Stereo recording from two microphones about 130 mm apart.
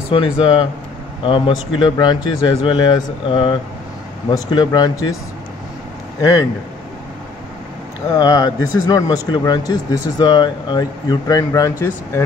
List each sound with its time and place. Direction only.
0.1 s speech: 40° left (ahead or behind)
8.1 s speech: 30° left (ahead or behind)